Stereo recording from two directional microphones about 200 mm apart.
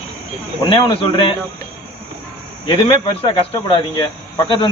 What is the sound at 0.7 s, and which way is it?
Speech, 25° left (ahead or behind).